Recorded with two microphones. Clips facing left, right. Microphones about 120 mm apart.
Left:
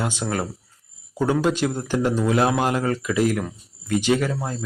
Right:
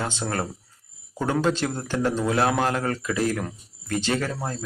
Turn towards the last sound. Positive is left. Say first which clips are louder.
# left 5 dB
turn(degrees=15)  # may be behind; listen again after turning